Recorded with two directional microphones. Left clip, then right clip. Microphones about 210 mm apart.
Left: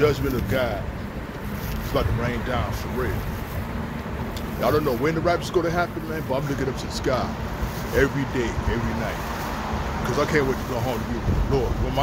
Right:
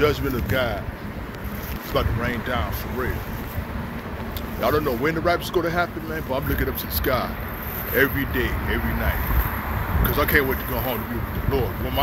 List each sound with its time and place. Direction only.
0.0 s speech: 20° right (ahead or behind)
2.0 s speech: 15° right (ahead or behind)
4.6 s speech: 15° right (ahead or behind)
10.1 s speech: 15° right (ahead or behind)